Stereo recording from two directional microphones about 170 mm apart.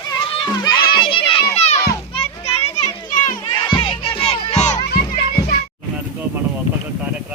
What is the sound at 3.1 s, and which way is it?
Children playing, 50° left (ahead or behind).